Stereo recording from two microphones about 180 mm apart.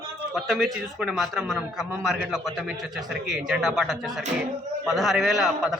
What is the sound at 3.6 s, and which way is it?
A man's voice, centre (ahead or behind).